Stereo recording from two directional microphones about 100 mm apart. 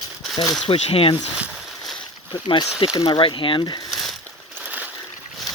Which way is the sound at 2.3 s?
55° left (ahead or behind).